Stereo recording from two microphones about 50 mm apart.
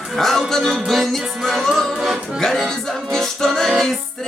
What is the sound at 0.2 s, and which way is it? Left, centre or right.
Music, centre.